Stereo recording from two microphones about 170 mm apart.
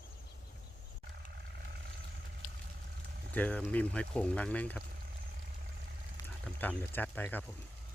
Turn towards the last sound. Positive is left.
turn(degrees=10)  # may be behind; listen again after turning